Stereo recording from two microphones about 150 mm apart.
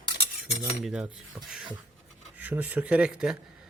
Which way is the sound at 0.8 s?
5° right (ahead or behind).